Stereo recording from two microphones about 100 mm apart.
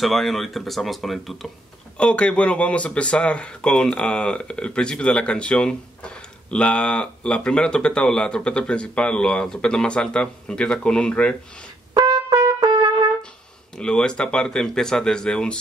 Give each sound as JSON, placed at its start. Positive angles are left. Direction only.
{"t": 0.0, "sound": "speech", "side_deg": 0}
{"t": 2.0, "sound": "speech", "side_deg": 10}
{"t": 11.9, "sound": "trumpet", "side_deg": -40}
{"t": 13.7, "sound": "speech", "side_deg": 10}